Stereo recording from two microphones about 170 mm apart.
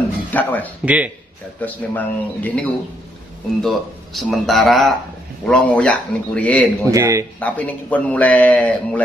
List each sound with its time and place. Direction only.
0.3 s a man's voice: 10° left (ahead or behind)
0.8 s speech: 10° right (ahead or behind)
1.6 s a man's voice: 10° left (ahead or behind)
6.8 s speech: 20° right (ahead or behind)
7.3 s a man's voice: 10° left (ahead or behind)